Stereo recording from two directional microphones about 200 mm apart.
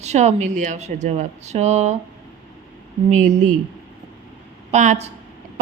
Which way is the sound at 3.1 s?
40° right (ahead or behind).